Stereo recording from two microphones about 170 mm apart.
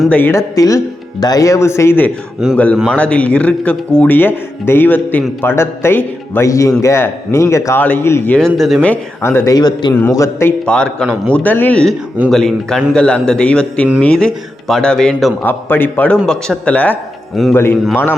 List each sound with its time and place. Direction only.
0.0 s a man's voice: 10° left (ahead or behind)
2.4 s a man's voice: 5° right (ahead or behind)
2.9 s a man's voice: 5° left (ahead or behind)